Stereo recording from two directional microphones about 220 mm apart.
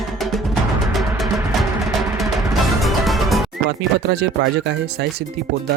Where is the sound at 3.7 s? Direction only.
50° right (ahead or behind).